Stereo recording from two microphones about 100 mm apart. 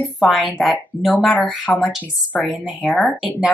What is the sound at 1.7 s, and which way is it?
Speech, 20° left (ahead or behind).